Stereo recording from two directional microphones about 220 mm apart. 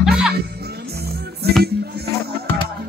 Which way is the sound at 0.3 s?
45° right (ahead or behind).